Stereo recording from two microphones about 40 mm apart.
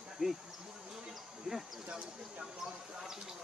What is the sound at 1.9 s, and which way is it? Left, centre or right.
Speech, right.